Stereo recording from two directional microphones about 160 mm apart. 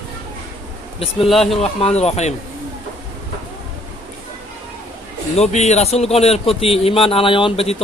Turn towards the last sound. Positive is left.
turn(degrees=35)  # may be behind; listen again after turning